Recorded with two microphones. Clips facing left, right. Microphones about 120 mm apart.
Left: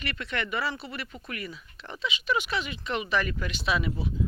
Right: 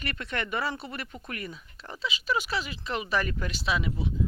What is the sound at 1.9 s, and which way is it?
Speech, 35° right (ahead or behind).